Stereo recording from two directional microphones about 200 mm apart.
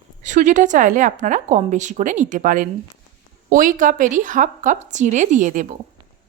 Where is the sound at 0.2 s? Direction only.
40° right (ahead or behind).